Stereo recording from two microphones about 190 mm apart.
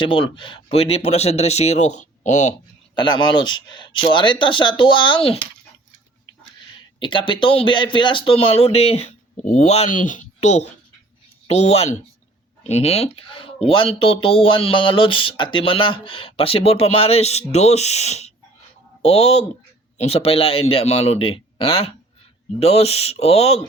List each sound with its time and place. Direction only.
0.0 s speech: 25° left (ahead or behind)
2.9 s speech: 25° left (ahead or behind)
7.0 s speech: 25° left (ahead or behind)